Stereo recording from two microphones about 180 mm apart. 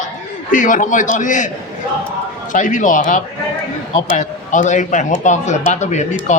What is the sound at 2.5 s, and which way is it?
A man's voice, 45° left (ahead or behind).